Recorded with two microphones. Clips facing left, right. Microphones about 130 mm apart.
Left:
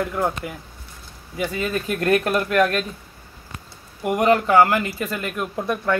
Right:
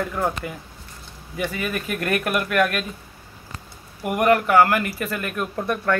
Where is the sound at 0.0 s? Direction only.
10° left (ahead or behind).